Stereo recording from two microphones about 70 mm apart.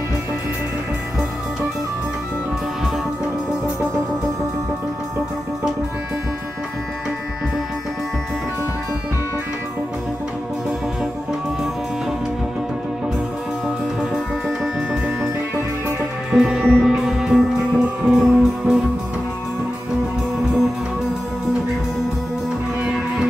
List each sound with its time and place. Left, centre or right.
16.3 s music: centre
22.8 s music: centre